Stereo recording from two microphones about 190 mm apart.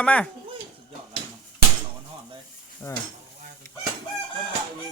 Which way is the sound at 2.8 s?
15° left (ahead or behind).